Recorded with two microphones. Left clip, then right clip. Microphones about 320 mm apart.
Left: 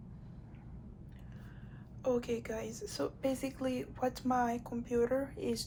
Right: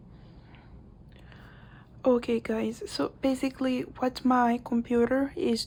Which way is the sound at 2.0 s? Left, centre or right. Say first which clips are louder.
Right 9 dB; right.